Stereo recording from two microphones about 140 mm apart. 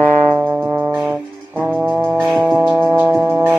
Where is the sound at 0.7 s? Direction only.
20° right (ahead or behind).